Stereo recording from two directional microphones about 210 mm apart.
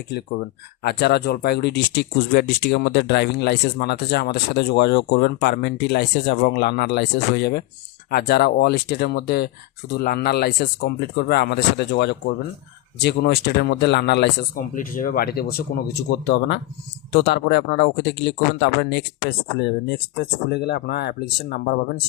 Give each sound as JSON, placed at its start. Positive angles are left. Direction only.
{"t": 0.8, "sound": "speech", "side_deg": 50}
{"t": 14.8, "sound": "speech", "side_deg": 40}